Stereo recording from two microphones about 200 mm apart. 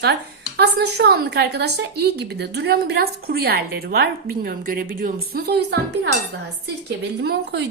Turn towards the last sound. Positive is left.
turn(degrees=-55)  # may be behind; listen again after turning